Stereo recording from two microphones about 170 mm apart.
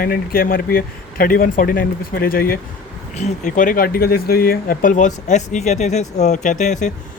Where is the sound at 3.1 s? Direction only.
45° left (ahead or behind).